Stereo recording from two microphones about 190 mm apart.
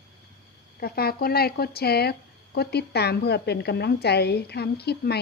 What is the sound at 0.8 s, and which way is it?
A woman's voice, 55° left (ahead or behind).